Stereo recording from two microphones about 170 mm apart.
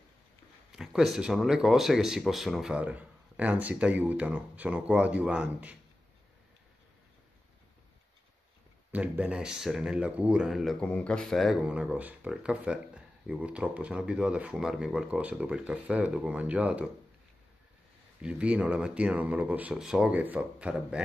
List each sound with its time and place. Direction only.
0.7 s speech: centre (ahead or behind)
8.9 s speech: 10° right (ahead or behind)
18.2 s speech: 5° right (ahead or behind)